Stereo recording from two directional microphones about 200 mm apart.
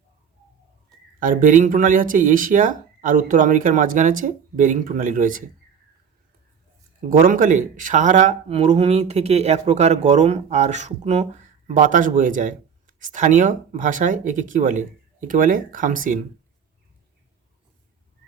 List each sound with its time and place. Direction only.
1.2 s speech: 40° right (ahead or behind)
7.1 s speech: 45° right (ahead or behind)